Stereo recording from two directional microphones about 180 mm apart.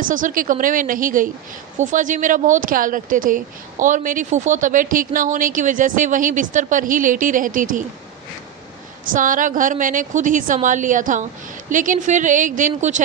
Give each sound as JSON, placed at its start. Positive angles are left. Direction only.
{"t": 0.0, "sound": "speech", "side_deg": -50}
{"t": 9.0, "sound": "speech", "side_deg": -50}